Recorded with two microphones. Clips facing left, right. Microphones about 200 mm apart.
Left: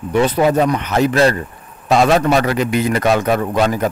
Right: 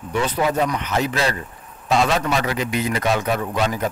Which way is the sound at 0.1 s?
60° left (ahead or behind).